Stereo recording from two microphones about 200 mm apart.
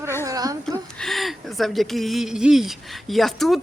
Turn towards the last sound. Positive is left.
turn(degrees=0)  # may be behind; listen again after turning